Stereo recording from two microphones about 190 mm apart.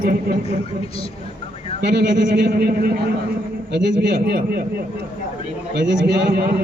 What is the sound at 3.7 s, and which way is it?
Speech, 65° right (ahead or behind).